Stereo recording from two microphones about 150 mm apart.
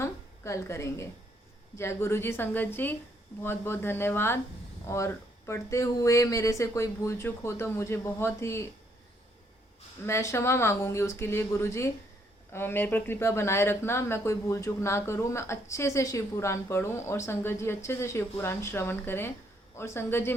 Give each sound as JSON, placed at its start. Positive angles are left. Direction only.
{"t": 0.0, "sound": "a sound", "side_deg": 20}
{"t": 1.7, "sound": "speech", "side_deg": 20}
{"t": 10.1, "sound": "speech", "side_deg": 20}